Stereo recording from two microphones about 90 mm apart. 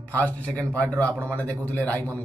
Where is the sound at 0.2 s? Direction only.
15° left (ahead or behind).